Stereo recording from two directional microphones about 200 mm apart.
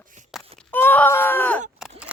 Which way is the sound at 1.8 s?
5° right (ahead or behind).